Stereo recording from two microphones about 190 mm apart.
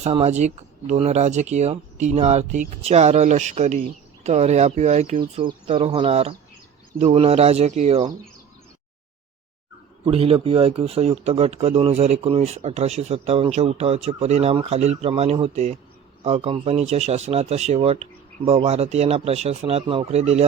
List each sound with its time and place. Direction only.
0.0 s speech: 35° right (ahead or behind)
10.1 s speech: 30° right (ahead or behind)